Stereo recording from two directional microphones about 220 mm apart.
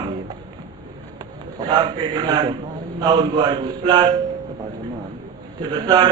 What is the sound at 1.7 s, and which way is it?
A man's voice, 20° right (ahead or behind).